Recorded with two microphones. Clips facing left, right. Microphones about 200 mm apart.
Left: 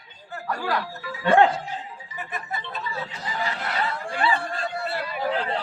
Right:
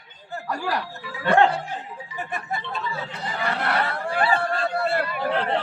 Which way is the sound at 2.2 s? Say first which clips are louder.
Right 3 dB; 30° right (ahead or behind).